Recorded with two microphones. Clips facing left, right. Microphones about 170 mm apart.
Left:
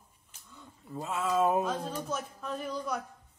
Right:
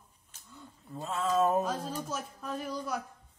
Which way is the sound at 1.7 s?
5° right (ahead or behind).